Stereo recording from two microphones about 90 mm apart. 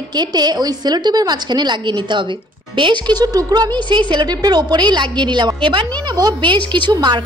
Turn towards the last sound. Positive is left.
turn(degrees=-55)  # may be behind; listen again after turning